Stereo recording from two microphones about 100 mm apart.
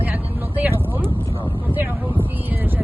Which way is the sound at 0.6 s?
20° right (ahead or behind).